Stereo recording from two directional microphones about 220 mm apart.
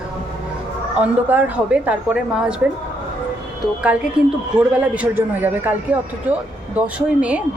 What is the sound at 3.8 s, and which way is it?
A woman's voice, 5° right (ahead or behind).